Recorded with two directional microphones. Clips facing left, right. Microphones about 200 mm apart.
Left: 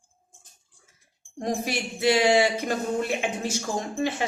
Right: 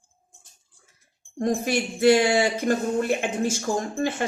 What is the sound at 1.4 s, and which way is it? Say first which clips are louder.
Speech: right 4 dB; 50° right (ahead or behind).